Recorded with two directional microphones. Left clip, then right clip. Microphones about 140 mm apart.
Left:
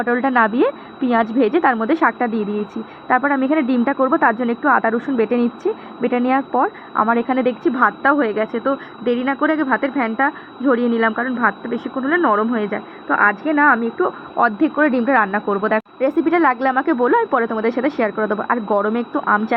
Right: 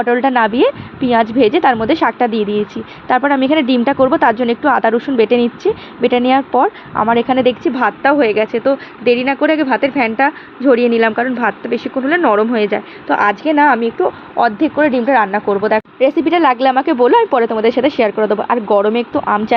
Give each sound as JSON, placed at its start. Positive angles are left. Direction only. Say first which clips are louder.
{"t": 0.0, "sound": "speech", "louder": "right 4 dB", "side_deg": -50}
{"t": 14.3, "sound": "speech", "louder": "right 3 dB", "side_deg": -50}